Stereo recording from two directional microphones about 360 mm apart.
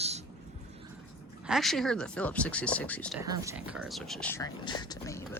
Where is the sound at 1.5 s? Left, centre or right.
Centre.